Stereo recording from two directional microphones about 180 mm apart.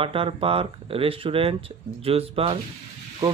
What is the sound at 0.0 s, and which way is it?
Speech, 30° right (ahead or behind).